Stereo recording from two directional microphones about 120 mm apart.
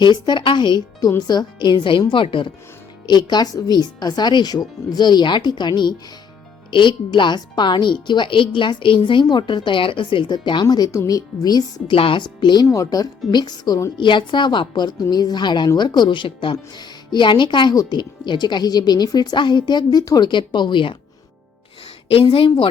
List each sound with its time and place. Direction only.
0.0 s a woman's voice: 40° left (ahead or behind)
11.9 s a woman's voice: 45° left (ahead or behind)
12.6 s a woman's voice: 25° left (ahead or behind)
14.0 s a woman's voice: 40° left (ahead or behind)
22.1 s a woman's voice: 50° left (ahead or behind)